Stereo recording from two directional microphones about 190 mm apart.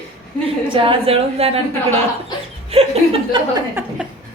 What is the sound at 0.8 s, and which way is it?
Speech, 30° right (ahead or behind).